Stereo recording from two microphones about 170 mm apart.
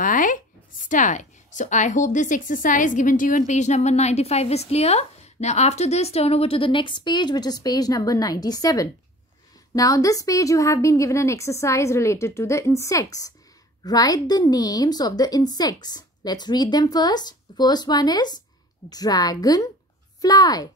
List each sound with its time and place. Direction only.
0.0 s a woman's voice: 55° left (ahead or behind); by 20.6 s 20° left (ahead or behind)